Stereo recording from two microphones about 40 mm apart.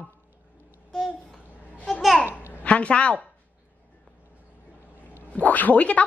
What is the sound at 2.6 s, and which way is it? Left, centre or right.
Speech, left.